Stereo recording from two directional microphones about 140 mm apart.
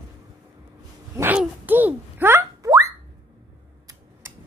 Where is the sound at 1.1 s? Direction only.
10° right (ahead or behind).